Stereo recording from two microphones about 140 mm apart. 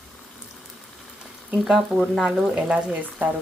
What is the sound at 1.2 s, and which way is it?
Speech, 5° right (ahead or behind).